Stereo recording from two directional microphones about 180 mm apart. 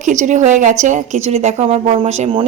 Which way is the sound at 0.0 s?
45° right (ahead or behind).